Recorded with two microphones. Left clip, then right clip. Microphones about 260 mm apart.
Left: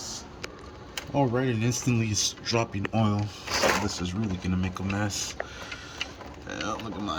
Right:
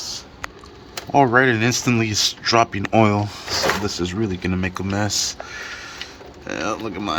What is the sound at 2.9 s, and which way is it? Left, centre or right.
Speech, right.